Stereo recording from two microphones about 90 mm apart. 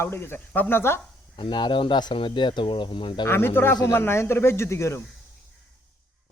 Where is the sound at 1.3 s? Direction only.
60° left (ahead or behind).